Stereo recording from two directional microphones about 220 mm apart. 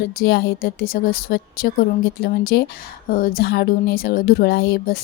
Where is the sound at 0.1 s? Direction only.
45° left (ahead or behind).